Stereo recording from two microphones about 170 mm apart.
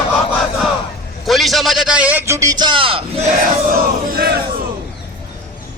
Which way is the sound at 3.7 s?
60° right (ahead or behind).